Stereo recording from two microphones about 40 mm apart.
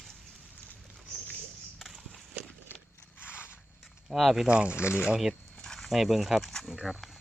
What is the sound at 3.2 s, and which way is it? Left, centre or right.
Biting, left.